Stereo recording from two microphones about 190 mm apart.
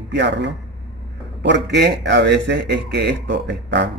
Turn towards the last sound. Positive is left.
turn(degrees=-65)  # may be behind; listen again after turning